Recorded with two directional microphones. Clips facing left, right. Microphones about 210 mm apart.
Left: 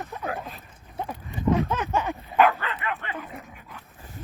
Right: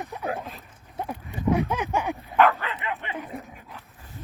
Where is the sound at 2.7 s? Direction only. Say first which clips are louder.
Even; 15° right (ahead or behind).